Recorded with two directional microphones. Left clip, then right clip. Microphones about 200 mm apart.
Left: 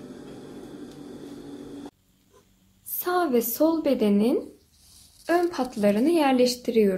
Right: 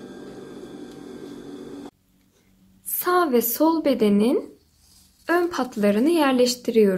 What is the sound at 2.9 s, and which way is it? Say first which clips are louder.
A woman's voice: right 4 dB; 15° right (ahead or behind).